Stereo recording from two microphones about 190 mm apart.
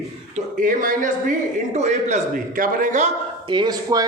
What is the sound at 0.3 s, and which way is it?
A man's voice, 45° right (ahead or behind).